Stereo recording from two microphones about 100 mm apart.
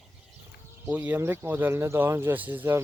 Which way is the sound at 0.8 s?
15° right (ahead or behind).